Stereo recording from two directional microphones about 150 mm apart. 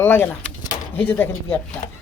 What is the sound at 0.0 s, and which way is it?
Speech, 15° left (ahead or behind).